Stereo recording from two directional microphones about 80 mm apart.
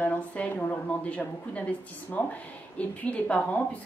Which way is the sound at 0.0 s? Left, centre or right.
Centre.